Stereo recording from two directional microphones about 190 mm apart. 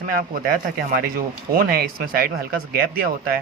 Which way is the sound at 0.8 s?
50° right (ahead or behind).